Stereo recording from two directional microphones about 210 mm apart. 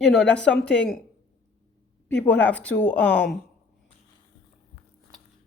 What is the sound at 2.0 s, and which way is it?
Speech, 5° left (ahead or behind).